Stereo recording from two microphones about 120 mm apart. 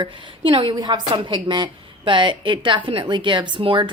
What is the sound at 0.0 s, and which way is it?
A woman's voice, 45° right (ahead or behind).